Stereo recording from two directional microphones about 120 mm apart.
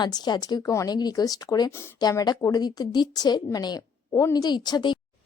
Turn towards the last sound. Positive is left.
turn(degrees=40)  # may be behind; listen again after turning